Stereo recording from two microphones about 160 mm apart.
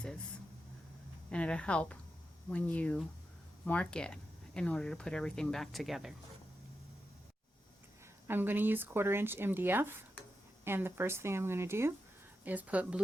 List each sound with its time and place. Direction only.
1.3 s speech: 5° left (ahead or behind)
8.3 s speech: 10° right (ahead or behind)